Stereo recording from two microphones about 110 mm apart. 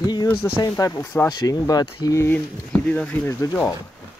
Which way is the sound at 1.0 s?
20° left (ahead or behind).